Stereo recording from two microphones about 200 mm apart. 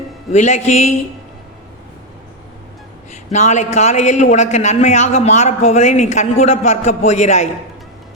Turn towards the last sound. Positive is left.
turn(degrees=35)  # may be behind; listen again after turning